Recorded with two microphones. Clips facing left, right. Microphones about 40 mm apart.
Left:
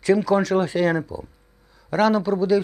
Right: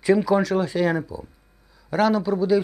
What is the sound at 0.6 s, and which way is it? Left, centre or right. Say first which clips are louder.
Speech: left 1 dB; centre.